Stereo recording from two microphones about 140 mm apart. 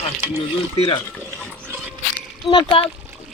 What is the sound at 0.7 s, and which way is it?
Speech, 40° left (ahead or behind).